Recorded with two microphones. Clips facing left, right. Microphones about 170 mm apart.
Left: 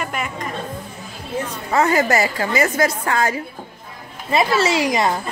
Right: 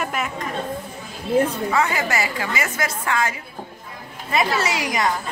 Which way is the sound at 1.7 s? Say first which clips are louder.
Left 5 dB; 40° left (ahead or behind).